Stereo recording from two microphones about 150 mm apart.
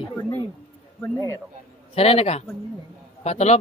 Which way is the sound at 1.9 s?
40° left (ahead or behind).